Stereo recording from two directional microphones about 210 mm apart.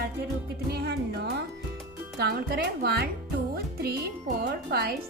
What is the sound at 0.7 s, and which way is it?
Music, 50° right (ahead or behind).